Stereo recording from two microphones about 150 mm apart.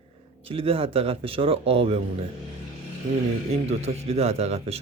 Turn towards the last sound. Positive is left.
turn(degrees=-45)  # may be behind; listen again after turning